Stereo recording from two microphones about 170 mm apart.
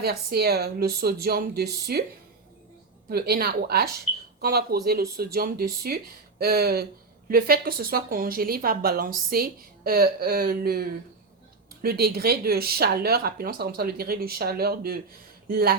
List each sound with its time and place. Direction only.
0.0 s a woman's voice: 70° right (ahead or behind)
3.1 s a woman's voice: 65° right (ahead or behind)